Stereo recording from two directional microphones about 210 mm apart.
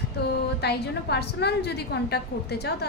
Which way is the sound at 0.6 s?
50° left (ahead or behind).